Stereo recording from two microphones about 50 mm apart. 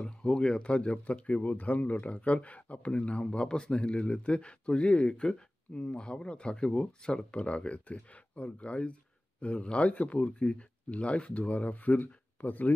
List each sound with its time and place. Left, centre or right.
0.0 s speech: centre; by 12.7 s left